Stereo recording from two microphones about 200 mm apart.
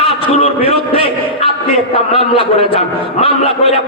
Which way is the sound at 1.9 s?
30° left (ahead or behind).